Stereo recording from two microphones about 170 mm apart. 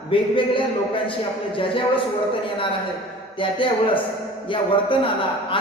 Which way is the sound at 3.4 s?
30° left (ahead or behind).